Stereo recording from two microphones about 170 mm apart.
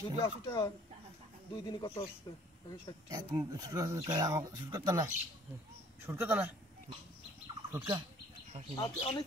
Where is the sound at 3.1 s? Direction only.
20° right (ahead or behind).